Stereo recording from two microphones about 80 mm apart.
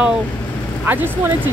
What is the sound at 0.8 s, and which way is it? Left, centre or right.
Speech, right.